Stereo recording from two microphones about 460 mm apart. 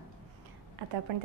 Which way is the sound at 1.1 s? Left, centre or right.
Right.